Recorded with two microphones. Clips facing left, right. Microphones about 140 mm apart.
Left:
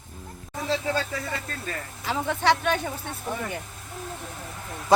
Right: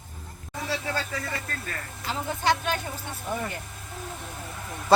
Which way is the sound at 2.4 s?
70° left (ahead or behind).